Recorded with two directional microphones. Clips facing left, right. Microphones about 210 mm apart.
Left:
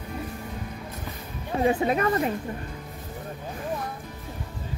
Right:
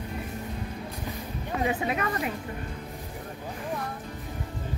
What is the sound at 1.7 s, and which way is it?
Speech, 35° left (ahead or behind).